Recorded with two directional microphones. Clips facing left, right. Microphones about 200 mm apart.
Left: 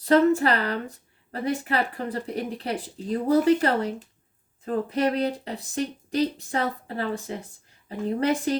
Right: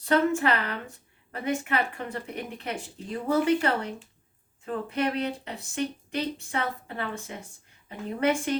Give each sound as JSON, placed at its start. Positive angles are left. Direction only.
{"t": 0.0, "sound": "a woman's voice", "side_deg": 35}